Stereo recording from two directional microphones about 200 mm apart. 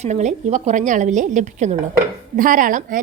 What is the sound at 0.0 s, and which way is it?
A woman's voice, 35° right (ahead or behind).